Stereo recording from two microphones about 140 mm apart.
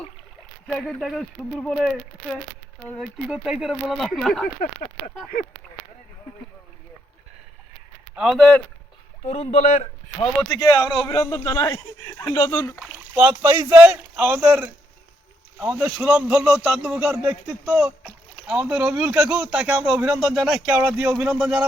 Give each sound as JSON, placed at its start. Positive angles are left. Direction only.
{"t": 0.7, "sound": "speech", "side_deg": 5}
{"t": 8.1, "sound": "speech", "side_deg": -5}
{"t": 9.2, "sound": "speech", "side_deg": 50}
{"t": 10.5, "sound": "a man's voice", "side_deg": 25}
{"t": 13.1, "sound": "speech", "side_deg": -15}
{"t": 20.7, "sound": "speech", "side_deg": -10}